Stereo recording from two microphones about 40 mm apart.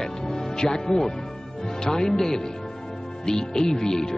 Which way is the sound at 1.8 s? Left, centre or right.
Centre.